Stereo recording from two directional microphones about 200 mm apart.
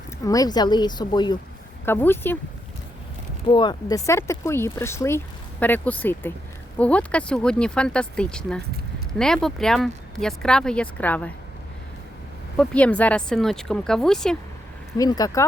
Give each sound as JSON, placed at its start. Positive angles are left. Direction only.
{"t": 0.3, "sound": "speech", "side_deg": 20}
{"t": 1.8, "sound": "speech", "side_deg": 10}
{"t": 3.4, "sound": "speech", "side_deg": 20}
{"t": 12.5, "sound": "speech", "side_deg": 5}
{"t": 14.9, "sound": "speech", "side_deg": 20}